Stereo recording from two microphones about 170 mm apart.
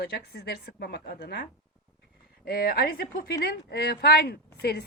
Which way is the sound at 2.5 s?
65° left (ahead or behind).